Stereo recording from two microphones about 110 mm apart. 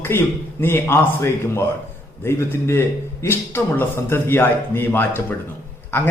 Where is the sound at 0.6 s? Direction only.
20° left (ahead or behind).